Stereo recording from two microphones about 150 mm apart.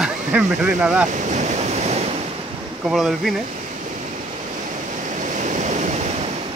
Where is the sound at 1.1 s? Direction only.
50° right (ahead or behind).